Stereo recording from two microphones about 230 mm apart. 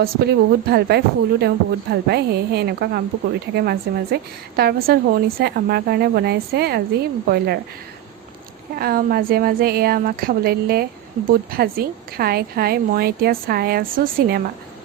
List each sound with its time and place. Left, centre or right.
0.0 s a woman's voice: right
8.7 s a woman's voice: right